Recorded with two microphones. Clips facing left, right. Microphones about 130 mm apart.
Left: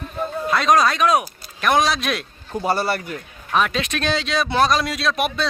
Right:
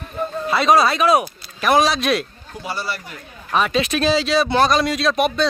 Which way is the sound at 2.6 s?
50° left (ahead or behind).